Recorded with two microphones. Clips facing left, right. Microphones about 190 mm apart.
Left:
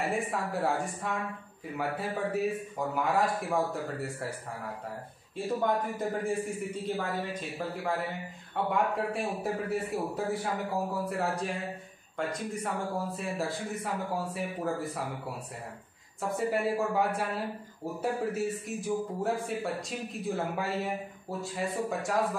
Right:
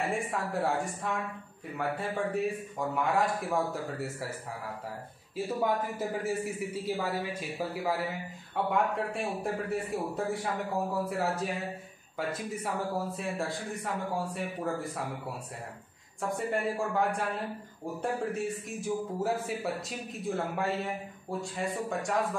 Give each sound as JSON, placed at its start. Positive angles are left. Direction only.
{"t": 0.0, "sound": "a man's voice", "side_deg": 0}
{"t": 5.3, "sound": "a man's voice", "side_deg": -5}
{"t": 16.2, "sound": "a man's voice", "side_deg": 0}
{"t": 18.3, "sound": "a man's voice", "side_deg": 0}